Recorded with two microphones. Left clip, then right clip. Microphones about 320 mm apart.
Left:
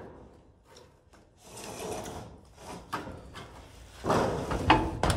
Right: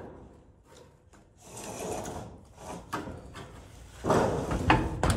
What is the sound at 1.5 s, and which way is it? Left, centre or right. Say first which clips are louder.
Drawer open or close: right 1 dB; centre.